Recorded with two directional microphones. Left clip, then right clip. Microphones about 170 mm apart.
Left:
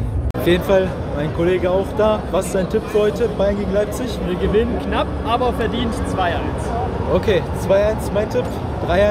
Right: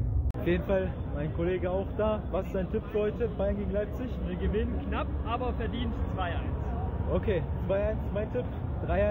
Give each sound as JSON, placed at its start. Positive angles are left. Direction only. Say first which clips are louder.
{"t": 0.5, "sound": "speech", "louder": "left 13 dB", "side_deg": 10}
{"t": 4.3, "sound": "speech", "louder": "left 15 dB", "side_deg": 25}
{"t": 7.2, "sound": "speech", "louder": "left 13 dB", "side_deg": 0}